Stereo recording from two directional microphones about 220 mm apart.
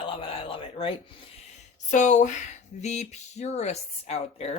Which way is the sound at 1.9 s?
35° left (ahead or behind).